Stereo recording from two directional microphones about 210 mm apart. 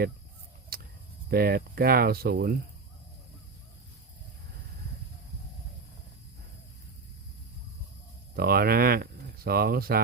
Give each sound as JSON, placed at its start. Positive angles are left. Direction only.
{"t": 0.7, "sound": "a sound", "side_deg": -45}
{"t": 1.3, "sound": "speech", "side_deg": -45}
{"t": 8.4, "sound": "speech", "side_deg": -45}